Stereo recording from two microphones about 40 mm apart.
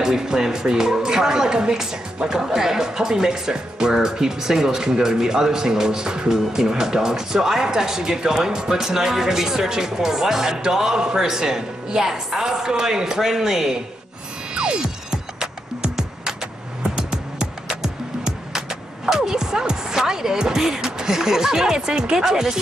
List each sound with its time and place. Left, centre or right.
0.0 s speech: centre
14.5 s music: right
15.0 s music: centre
16.8 s music: centre